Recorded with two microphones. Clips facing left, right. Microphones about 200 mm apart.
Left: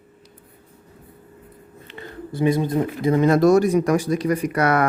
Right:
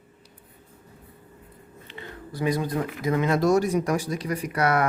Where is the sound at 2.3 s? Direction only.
25° left (ahead or behind).